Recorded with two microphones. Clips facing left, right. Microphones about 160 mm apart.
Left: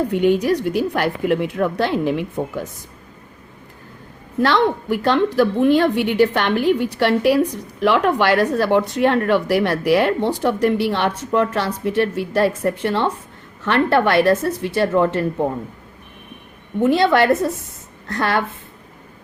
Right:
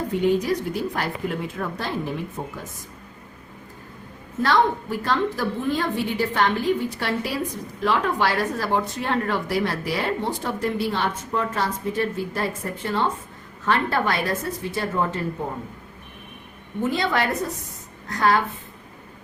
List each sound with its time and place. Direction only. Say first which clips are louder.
0.1 s a woman's voice: even; 70° left (ahead or behind)
4.4 s a woman's voice: left 3 dB; 75° left (ahead or behind)
16.8 s a woman's voice: left 8 dB; 70° left (ahead or behind)